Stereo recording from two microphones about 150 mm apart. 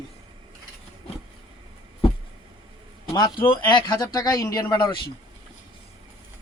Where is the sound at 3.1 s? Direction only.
25° left (ahead or behind).